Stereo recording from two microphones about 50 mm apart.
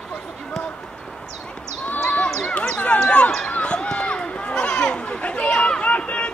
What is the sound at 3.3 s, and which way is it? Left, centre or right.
Run, left.